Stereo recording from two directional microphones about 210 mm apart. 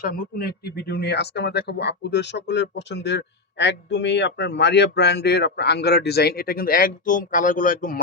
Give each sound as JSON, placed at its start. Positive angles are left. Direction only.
{"t": 0.0, "sound": "speech", "side_deg": 45}